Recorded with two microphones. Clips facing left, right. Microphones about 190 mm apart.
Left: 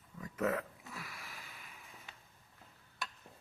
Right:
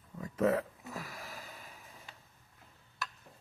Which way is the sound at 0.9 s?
40° right (ahead or behind).